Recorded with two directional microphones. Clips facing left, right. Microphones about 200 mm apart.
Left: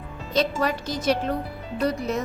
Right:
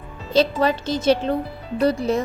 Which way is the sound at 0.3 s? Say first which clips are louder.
Right 5 dB; 25° right (ahead or behind).